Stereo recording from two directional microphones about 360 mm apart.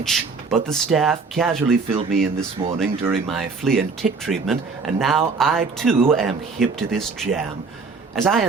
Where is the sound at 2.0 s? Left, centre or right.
Right.